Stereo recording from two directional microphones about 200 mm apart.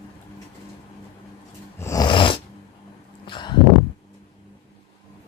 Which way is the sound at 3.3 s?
25° left (ahead or behind).